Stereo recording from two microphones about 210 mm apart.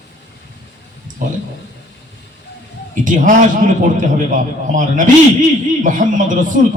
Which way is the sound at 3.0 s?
40° right (ahead or behind).